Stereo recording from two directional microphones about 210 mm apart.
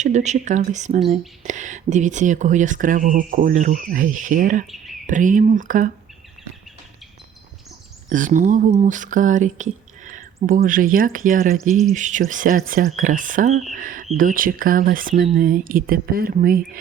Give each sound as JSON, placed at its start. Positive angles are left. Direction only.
{"t": 0.0, "sound": "speech", "side_deg": -35}
{"t": 4.6, "sound": "speech", "side_deg": 0}
{"t": 5.0, "sound": "speech", "side_deg": -40}
{"t": 8.1, "sound": "speech", "side_deg": -40}